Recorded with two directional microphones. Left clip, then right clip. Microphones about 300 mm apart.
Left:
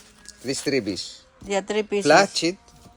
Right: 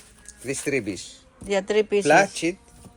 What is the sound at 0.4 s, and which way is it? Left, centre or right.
Speech, left.